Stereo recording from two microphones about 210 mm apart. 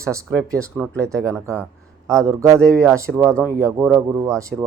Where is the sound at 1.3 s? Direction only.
15° right (ahead or behind).